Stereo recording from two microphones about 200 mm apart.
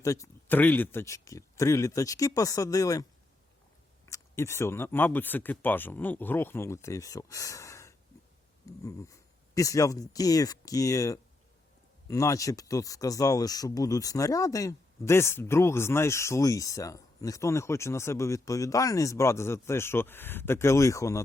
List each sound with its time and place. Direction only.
0.0 s speech: 15° left (ahead or behind)